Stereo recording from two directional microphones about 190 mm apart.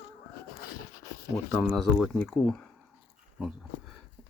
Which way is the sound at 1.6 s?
Centre (ahead or behind).